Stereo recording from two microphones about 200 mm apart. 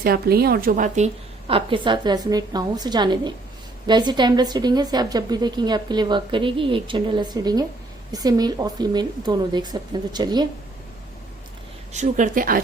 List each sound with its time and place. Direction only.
0.0 s a woman's voice: 50° right (ahead or behind); by 10.4 s 20° right (ahead or behind)
11.9 s speech: 35° right (ahead or behind)